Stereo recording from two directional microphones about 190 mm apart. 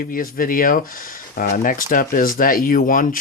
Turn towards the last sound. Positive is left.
turn(degrees=45)  # may be behind; listen again after turning